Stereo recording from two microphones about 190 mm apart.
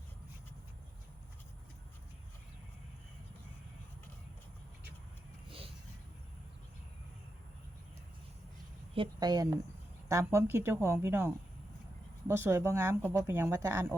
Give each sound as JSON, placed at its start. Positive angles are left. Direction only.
{"t": 9.0, "sound": "speech", "side_deg": -20}